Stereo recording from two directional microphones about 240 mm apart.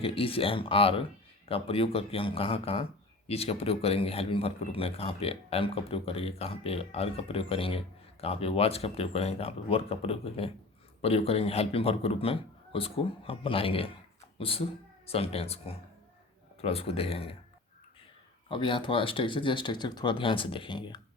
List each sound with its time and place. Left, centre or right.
0.0 s a man's voice: left
18.4 s a man's voice: left